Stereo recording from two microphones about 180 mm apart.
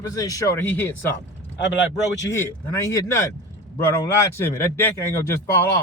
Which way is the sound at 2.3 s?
15° left (ahead or behind).